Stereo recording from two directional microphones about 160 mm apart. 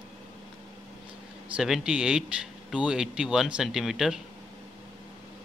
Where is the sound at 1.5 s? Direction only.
5° right (ahead or behind).